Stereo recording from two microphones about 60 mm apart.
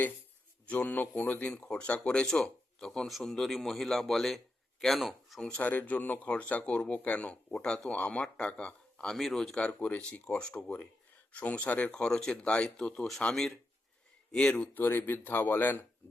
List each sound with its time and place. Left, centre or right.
0.7 s a man's voice: left; by 5.4 s centre
5.4 s speech: left
9.1 s speech: centre
14.7 s speech: left